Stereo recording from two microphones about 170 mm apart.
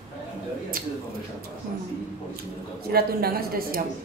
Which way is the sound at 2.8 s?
65° right (ahead or behind).